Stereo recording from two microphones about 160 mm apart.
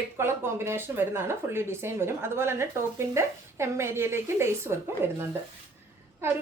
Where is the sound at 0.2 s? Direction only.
15° right (ahead or behind).